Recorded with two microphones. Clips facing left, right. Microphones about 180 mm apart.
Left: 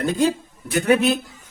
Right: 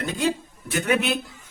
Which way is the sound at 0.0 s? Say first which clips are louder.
Left 5 dB; 45° left (ahead or behind).